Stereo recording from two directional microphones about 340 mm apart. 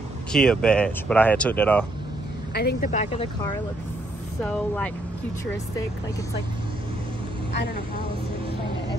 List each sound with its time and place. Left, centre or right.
0.3 s speech: centre
2.5 s speech: left
4.4 s speech: centre